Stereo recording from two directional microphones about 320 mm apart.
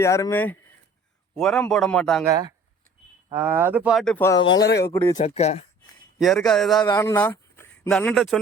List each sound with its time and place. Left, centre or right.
0.0 s speech: centre
2.3 s speech: centre
4.6 s speech: left
4.9 s speech: centre
6.1 s speech: centre